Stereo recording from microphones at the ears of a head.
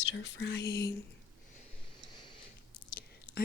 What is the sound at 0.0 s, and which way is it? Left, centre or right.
Whispering, left.